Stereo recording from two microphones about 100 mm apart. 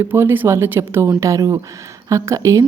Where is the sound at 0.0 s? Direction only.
25° right (ahead or behind).